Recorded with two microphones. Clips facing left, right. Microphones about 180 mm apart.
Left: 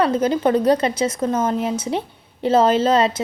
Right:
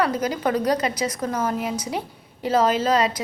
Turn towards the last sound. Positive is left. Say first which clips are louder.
# left 4 dB
turn(degrees=25)  # may be behind; listen again after turning